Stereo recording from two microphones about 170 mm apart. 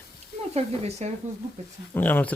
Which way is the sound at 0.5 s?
40° right (ahead or behind).